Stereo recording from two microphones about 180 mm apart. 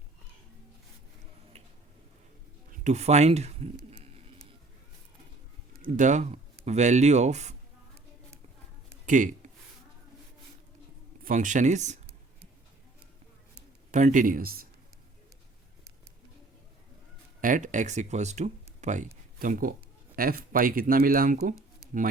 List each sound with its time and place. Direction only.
2.7 s speech: 40° right (ahead or behind)
5.8 s speech: 45° right (ahead or behind)
9.0 s a sound: 45° right (ahead or behind)
11.2 s speech: 45° right (ahead or behind)
13.9 s speech: 45° right (ahead or behind)
17.4 s speech: 45° right (ahead or behind)